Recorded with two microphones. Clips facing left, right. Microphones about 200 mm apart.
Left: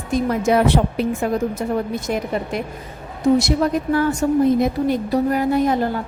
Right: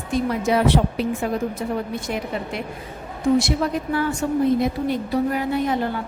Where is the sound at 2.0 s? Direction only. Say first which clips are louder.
Left 4 dB; 45° left (ahead or behind).